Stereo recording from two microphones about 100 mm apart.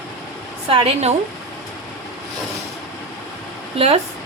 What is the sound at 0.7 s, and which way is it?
Speech, 70° right (ahead or behind).